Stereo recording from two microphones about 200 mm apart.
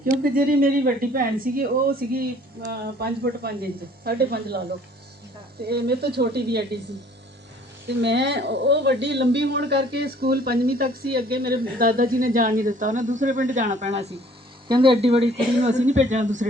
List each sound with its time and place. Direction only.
0.0 s a woman's voice: 45° right (ahead or behind)
5.6 s a woman's voice: 55° right (ahead or behind)
7.9 s a woman's voice: 60° right (ahead or behind); by 16.5 s 35° right (ahead or behind)